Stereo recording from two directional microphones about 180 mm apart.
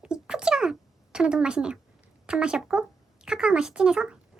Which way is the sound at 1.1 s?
5° right (ahead or behind).